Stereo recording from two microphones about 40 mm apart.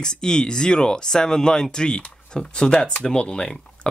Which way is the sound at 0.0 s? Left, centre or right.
Centre.